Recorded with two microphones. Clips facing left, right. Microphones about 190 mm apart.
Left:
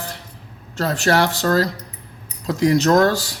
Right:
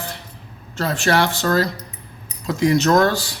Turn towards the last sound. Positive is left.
turn(degrees=40)  # may be behind; listen again after turning